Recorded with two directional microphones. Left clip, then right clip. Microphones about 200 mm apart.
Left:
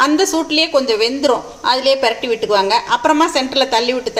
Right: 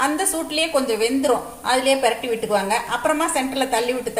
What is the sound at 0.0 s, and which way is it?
A woman's voice, 40° left (ahead or behind).